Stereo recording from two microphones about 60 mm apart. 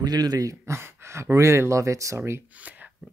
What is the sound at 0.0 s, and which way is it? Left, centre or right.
Speech, right.